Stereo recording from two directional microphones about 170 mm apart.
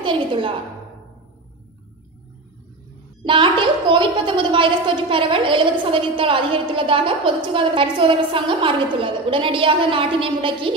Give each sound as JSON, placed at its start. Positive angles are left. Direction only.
{"t": 0.0, "sound": "a woman's voice", "side_deg": -30}
{"t": 3.3, "sound": "a woman's voice", "side_deg": -30}